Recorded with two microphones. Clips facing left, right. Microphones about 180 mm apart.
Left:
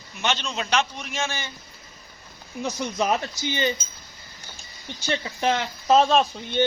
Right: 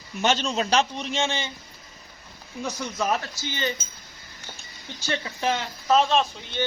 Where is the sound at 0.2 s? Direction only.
40° right (ahead or behind); by 1.5 s 20° right (ahead or behind).